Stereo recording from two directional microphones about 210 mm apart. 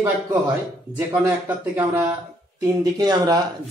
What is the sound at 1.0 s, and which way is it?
A man's voice, 10° right (ahead or behind).